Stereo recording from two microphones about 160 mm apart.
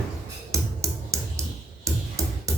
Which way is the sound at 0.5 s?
20° right (ahead or behind).